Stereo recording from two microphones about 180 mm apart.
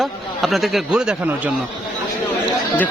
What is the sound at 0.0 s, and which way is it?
A man's voice, centre (ahead or behind).